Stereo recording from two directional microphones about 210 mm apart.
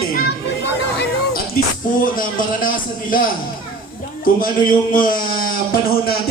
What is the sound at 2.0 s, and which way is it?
A man's voice, 40° left (ahead or behind).